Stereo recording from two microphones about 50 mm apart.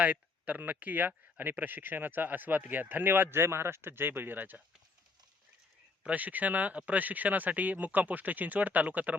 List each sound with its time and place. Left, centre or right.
0.0 s speech: right
6.0 s speech: right